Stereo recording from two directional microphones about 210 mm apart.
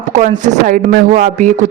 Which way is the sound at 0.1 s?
35° right (ahead or behind).